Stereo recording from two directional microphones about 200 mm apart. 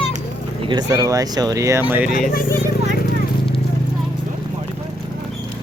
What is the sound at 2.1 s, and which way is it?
Speech, 45° left (ahead or behind).